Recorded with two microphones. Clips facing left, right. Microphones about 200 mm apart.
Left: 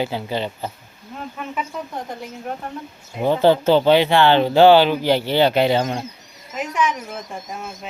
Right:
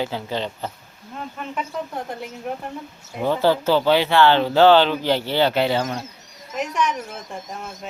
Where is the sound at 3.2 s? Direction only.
20° left (ahead or behind).